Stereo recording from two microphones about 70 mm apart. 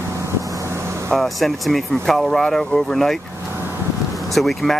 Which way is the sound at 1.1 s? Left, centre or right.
Centre.